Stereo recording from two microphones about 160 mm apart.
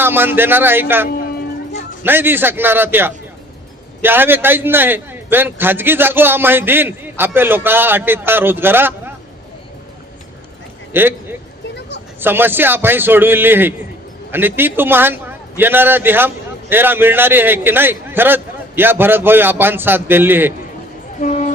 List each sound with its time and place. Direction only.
0.0 s a man's voice: 15° right (ahead or behind)
2.0 s a man's voice: 15° right (ahead or behind)
10.9 s a man's voice: 15° right (ahead or behind)
21.2 s vehicle: 50° left (ahead or behind)